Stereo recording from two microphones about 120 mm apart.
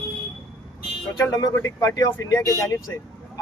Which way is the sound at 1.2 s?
30° left (ahead or behind).